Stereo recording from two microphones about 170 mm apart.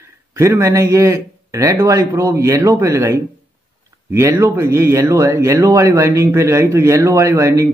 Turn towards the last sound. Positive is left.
turn(degrees=-15)  # may be behind; listen again after turning